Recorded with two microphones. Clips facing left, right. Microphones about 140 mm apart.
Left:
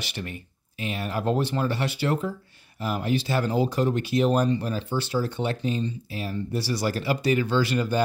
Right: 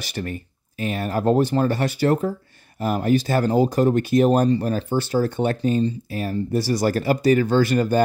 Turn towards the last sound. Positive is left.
turn(degrees=-45)  # may be behind; listen again after turning